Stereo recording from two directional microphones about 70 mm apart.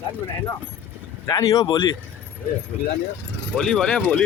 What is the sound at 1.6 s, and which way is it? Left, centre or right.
Speech, left.